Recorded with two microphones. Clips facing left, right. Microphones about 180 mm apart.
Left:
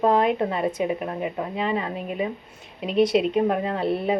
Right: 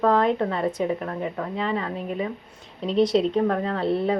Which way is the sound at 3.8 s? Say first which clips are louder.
Right 4 dB; 25° right (ahead or behind).